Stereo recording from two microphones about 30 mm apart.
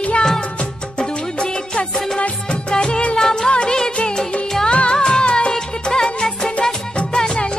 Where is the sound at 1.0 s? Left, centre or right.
Left.